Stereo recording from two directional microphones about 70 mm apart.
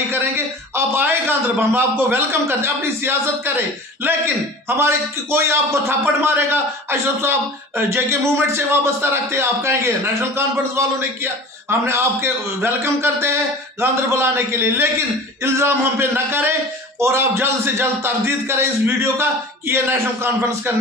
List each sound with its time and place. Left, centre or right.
0.7 s a man's voice: right
11.8 s a man's voice: right